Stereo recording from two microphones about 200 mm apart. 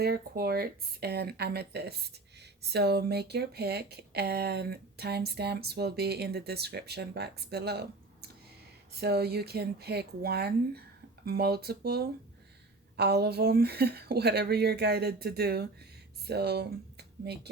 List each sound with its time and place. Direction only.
0.0 s speech: 50° right (ahead or behind)